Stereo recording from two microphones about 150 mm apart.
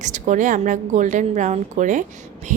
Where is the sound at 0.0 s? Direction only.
55° right (ahead or behind).